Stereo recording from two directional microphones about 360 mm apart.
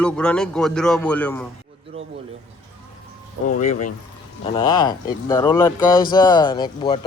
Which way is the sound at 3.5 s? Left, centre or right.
Centre.